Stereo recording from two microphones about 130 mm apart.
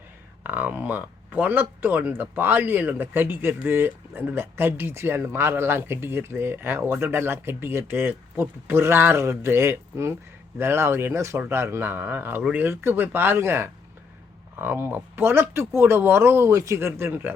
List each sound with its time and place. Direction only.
0.4 s speech: 10° right (ahead or behind)